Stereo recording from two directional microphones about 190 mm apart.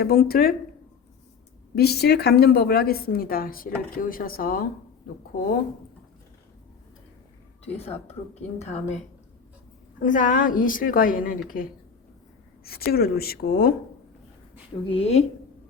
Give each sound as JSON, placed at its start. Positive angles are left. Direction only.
{"t": 0.0, "sound": "speech", "side_deg": 50}
{"t": 1.7, "sound": "speech", "side_deg": 55}
{"t": 7.6, "sound": "a woman's voice", "side_deg": 35}
{"t": 10.0, "sound": "speech", "side_deg": 45}
{"t": 12.6, "sound": "speech", "side_deg": 55}
{"t": 14.8, "sound": "a woman's voice", "side_deg": 30}